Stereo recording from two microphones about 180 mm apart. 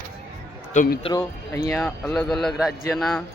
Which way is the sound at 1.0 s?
20° left (ahead or behind).